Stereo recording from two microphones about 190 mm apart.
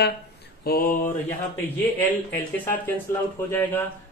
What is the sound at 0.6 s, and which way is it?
Mantra, 50° left (ahead or behind).